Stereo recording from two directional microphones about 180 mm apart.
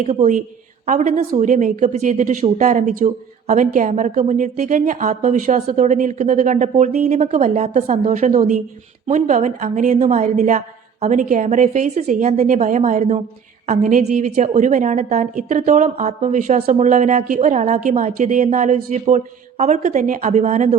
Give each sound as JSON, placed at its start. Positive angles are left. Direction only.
{"t": 0.0, "sound": "a woman's voice", "side_deg": -35}